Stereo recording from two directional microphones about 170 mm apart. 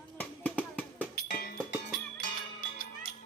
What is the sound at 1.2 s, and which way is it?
Music, 70° left (ahead or behind).